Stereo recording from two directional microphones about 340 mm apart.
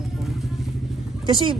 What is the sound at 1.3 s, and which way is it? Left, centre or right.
Speech, centre.